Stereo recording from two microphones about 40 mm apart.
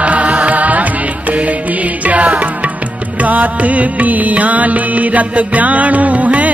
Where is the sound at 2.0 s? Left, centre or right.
Right.